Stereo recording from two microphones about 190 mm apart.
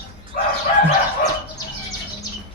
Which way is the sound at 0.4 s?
50° left (ahead or behind).